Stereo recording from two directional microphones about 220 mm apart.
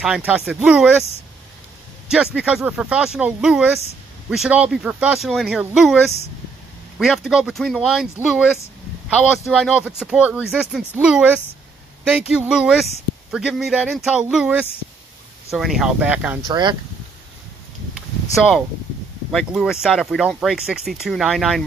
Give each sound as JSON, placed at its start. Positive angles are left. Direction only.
{"t": 0.0, "sound": "speech", "side_deg": -5}
{"t": 2.0, "sound": "speech", "side_deg": -5}
{"t": 7.0, "sound": "speech", "side_deg": -5}
{"t": 9.6, "sound": "speech", "side_deg": -5}
{"t": 16.4, "sound": "speech", "side_deg": -20}
{"t": 18.3, "sound": "speech", "side_deg": 0}